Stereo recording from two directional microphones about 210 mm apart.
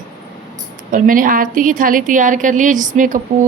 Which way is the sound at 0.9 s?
40° right (ahead or behind).